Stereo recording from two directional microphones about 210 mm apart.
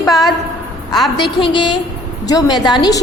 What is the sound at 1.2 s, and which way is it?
A woman's voice, 25° left (ahead or behind).